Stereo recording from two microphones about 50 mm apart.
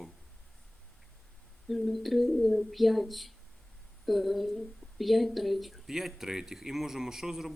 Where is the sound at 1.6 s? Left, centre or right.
Centre.